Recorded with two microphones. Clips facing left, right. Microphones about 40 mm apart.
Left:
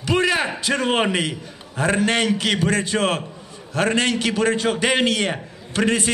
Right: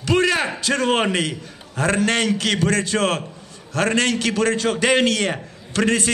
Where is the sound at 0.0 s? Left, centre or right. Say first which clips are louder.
Right 1 dB; centre.